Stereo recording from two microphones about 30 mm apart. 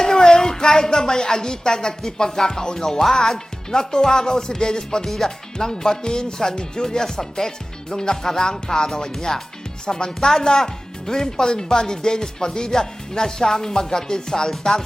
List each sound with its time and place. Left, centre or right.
0.0 s speech: left
5.0 s speech: centre
9.1 s speech: centre